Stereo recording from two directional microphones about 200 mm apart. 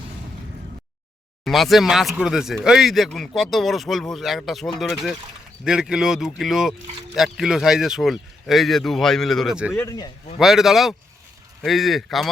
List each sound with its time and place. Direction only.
1.5 s speech: centre (ahead or behind)
9.7 s speech: 15° left (ahead or behind)
10.3 s speech: centre (ahead or behind)